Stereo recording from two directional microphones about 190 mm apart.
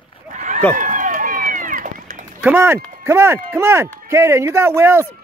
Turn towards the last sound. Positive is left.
turn(degrees=-15)  # may be behind; listen again after turning